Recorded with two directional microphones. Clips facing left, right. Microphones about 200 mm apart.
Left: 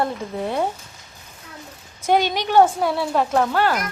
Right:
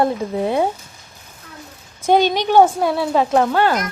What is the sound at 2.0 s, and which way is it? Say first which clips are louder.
A woman's voice: right 4 dB; 20° right (ahead or behind).